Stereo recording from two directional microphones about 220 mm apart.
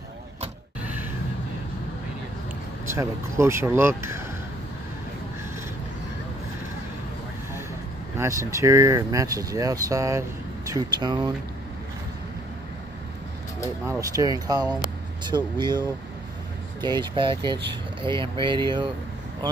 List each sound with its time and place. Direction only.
0.8 s a sound: 10° right (ahead or behind)
2.9 s speech: 10° right (ahead or behind)
8.2 s speech: 15° right (ahead or behind)
13.8 s speech: 15° right (ahead or behind)
16.8 s speech: 20° right (ahead or behind)